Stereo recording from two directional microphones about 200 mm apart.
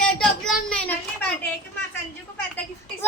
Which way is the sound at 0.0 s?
5° left (ahead or behind).